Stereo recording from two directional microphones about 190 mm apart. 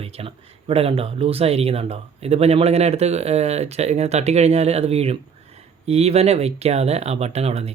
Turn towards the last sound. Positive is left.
turn(degrees=-35)  # may be behind; listen again after turning